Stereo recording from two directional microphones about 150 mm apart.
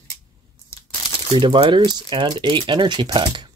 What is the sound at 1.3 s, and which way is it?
Speech, 30° right (ahead or behind).